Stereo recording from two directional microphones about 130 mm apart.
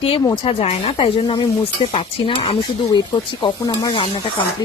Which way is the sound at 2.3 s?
55° left (ahead or behind).